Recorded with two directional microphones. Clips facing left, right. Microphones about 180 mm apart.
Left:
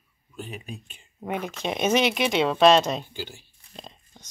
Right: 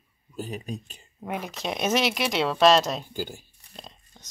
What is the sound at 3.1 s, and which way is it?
Speech, 45° right (ahead or behind).